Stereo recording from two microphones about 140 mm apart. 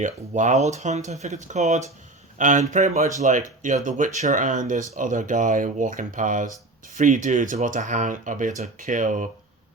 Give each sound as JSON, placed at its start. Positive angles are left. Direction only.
{"t": 0.0, "sound": "speech", "side_deg": -60}